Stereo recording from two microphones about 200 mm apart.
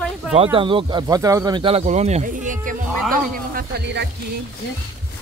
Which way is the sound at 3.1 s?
50° right (ahead or behind).